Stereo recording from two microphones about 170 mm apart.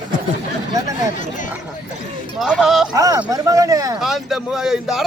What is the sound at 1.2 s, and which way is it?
Speech, 50° left (ahead or behind).